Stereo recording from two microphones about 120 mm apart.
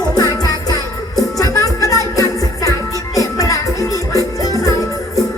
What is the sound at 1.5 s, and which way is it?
Music, 30° left (ahead or behind).